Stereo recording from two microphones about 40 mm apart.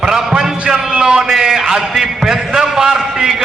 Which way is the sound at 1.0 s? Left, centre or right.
Centre.